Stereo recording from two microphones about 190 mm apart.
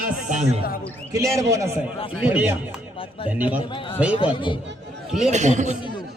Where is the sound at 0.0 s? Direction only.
40° right (ahead or behind).